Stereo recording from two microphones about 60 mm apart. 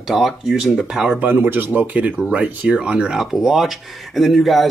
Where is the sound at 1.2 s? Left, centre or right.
Right; by 3.3 s centre.